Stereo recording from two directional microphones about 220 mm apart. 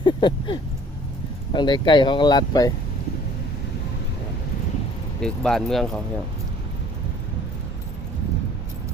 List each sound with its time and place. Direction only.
0.0 s a sound: 20° left (ahead or behind)
1.5 s speech: 20° left (ahead or behind)
5.2 s speech: 5° left (ahead or behind)